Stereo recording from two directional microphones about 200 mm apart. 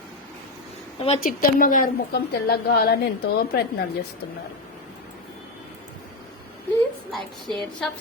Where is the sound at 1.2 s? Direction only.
45° left (ahead or behind).